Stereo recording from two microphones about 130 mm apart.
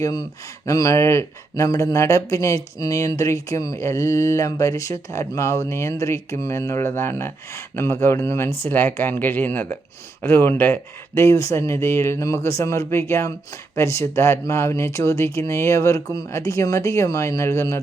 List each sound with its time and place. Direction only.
0.0 s speech: 30° left (ahead or behind)